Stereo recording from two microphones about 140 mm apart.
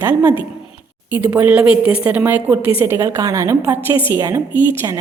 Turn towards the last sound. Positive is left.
turn(degrees=-20)  # may be behind; listen again after turning